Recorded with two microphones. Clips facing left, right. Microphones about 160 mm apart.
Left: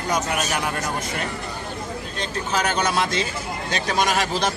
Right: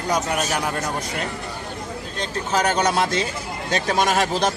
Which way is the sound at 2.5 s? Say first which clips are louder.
Right 3 dB; 40° right (ahead or behind).